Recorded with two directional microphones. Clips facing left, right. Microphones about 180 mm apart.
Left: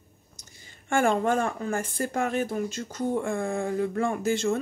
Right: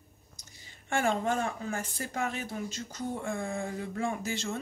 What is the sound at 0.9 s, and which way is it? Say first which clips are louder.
Speech: left 6 dB; 50° left (ahead or behind).